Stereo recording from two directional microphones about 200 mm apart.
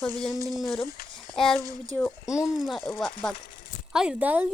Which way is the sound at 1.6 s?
15° right (ahead or behind).